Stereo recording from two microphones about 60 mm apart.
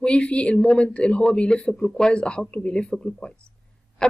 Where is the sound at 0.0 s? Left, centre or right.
Centre.